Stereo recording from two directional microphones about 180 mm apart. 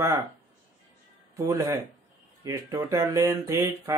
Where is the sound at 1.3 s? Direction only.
15° right (ahead or behind).